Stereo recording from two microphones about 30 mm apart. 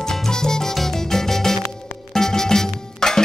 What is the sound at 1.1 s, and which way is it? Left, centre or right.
Music, centre.